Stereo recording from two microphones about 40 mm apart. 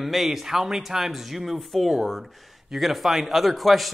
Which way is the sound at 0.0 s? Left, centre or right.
Centre.